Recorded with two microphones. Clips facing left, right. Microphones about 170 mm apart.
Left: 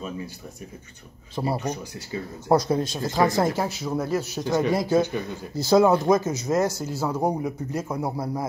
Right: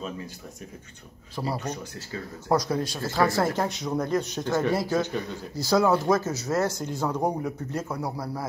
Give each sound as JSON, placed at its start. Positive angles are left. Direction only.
{"t": 1.3, "sound": "speech", "side_deg": 25}
{"t": 1.6, "sound": "speech", "side_deg": 10}
{"t": 3.6, "sound": "speech", "side_deg": 5}
{"t": 6.8, "sound": "speech", "side_deg": 5}
{"t": 8.0, "sound": "speech", "side_deg": 20}